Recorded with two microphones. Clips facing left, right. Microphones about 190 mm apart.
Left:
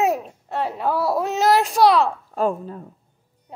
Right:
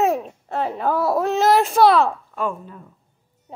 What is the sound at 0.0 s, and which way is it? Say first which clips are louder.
A child's voice: right 1 dB; centre (ahead or behind).